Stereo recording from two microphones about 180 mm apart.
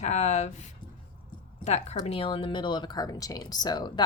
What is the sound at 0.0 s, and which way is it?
A woman's voice, 40° left (ahead or behind).